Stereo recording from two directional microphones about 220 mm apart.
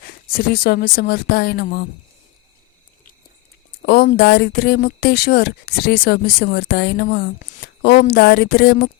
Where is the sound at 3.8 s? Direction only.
45° left (ahead or behind).